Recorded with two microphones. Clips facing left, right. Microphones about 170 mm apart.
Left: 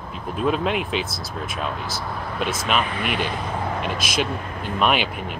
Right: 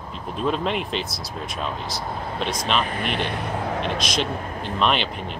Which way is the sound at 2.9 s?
40° right (ahead or behind).